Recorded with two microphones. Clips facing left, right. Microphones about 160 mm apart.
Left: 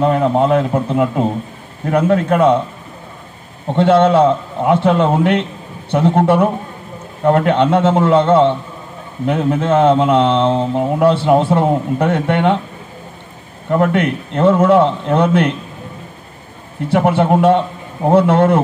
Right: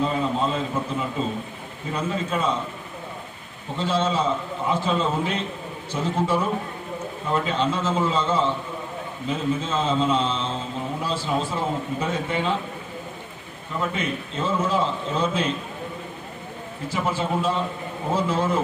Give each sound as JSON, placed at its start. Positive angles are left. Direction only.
{"t": 0.0, "sound": "a man's voice", "side_deg": 65}
{"t": 3.7, "sound": "a man's voice", "side_deg": 65}
{"t": 13.7, "sound": "a man's voice", "side_deg": 65}
{"t": 16.9, "sound": "a man's voice", "side_deg": 65}